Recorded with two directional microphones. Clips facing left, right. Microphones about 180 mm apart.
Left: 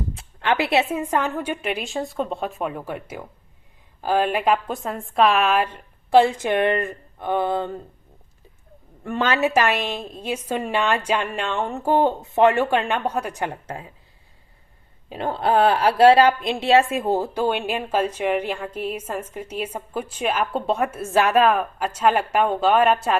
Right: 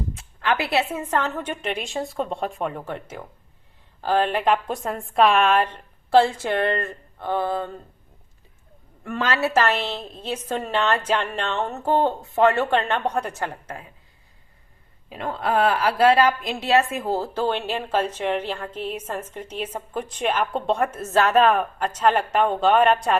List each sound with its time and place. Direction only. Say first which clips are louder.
0.1 s a sound: left 2 dB; 30° left (ahead or behind)
0.9 s speech: left 2 dB; 10° left (ahead or behind)
9.0 s speech: left 3 dB; 25° left (ahead or behind)
15.1 s a woman's voice: left 3 dB; 30° left (ahead or behind)
17.2 s speech: left 2 dB; 15° left (ahead or behind)